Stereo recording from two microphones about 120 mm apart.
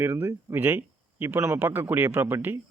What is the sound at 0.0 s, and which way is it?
Speech, 15° right (ahead or behind).